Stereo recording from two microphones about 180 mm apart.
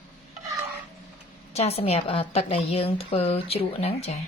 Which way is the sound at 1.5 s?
35° left (ahead or behind).